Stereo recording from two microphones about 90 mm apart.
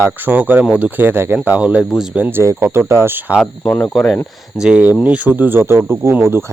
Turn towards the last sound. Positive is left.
turn(degrees=-25)  # may be behind; listen again after turning